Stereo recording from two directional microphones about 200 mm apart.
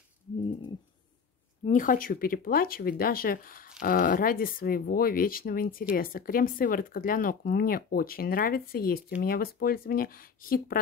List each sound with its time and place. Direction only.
1.6 s speech: 40° left (ahead or behind)